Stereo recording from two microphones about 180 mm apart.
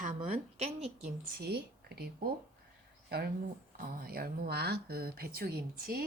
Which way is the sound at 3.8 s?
55° right (ahead or behind).